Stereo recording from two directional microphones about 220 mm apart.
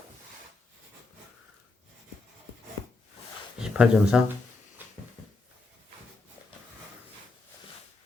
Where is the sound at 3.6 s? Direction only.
5° right (ahead or behind).